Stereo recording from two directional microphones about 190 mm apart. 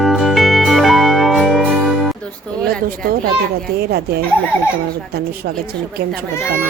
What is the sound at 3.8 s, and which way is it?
Speech, 55° right (ahead or behind).